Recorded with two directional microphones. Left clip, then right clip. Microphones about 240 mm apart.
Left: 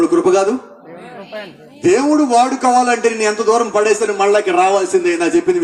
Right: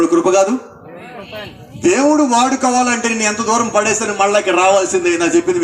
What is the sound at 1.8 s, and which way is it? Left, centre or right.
A man's voice, right.